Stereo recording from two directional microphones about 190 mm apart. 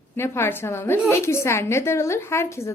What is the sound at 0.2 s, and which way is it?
A woman's voice, 15° left (ahead or behind).